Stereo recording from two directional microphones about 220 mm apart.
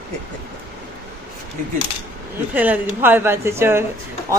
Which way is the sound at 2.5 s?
10° right (ahead or behind).